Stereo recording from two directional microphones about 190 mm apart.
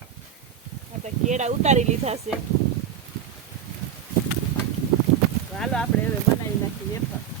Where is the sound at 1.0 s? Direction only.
35° right (ahead or behind).